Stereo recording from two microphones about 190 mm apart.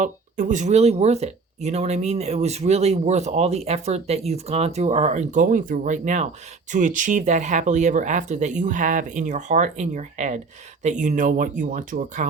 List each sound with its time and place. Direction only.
0.0 s speech: 45° right (ahead or behind)